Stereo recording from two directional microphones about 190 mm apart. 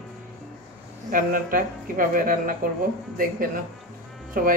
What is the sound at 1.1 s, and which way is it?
Speech, 45° right (ahead or behind).